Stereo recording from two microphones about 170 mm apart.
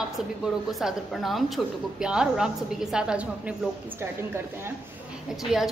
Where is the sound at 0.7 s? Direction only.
Centre (ahead or behind).